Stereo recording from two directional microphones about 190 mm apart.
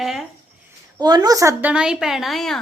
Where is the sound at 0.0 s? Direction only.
Centre (ahead or behind).